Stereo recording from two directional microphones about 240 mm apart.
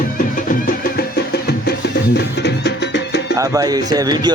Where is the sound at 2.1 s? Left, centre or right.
Left.